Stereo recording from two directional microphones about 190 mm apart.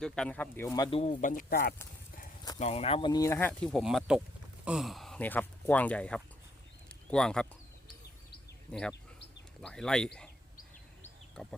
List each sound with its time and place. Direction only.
0.0 s speech: 5° left (ahead or behind)
0.9 s speech: 30° left (ahead or behind)
1.1 s speech: 45° left (ahead or behind)
2.6 s speech: 35° left (ahead or behind); by 6.2 s 5° left (ahead or behind)
6.8 s a sound: 5° left (ahead or behind)
8.7 s speech: 5° left (ahead or behind)
11.4 s speech: 5° left (ahead or behind)